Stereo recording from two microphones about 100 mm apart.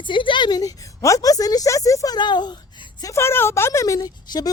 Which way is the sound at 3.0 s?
30° left (ahead or behind).